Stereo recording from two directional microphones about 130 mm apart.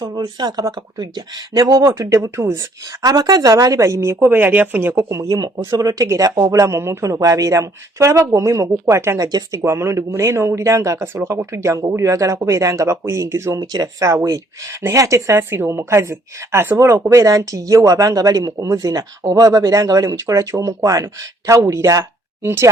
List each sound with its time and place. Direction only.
0.0 s a woman's voice: 30° right (ahead or behind)
3.0 s a woman's voice: 30° right (ahead or behind)